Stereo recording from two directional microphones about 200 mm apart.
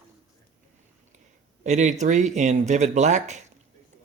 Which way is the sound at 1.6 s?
35° right (ahead or behind).